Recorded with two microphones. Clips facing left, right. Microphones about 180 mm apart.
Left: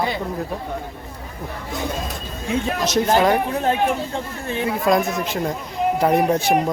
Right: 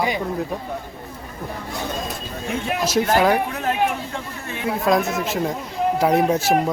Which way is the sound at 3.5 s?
30° left (ahead or behind).